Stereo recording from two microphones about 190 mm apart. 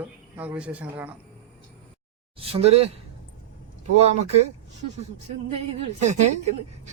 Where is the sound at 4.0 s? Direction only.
35° right (ahead or behind).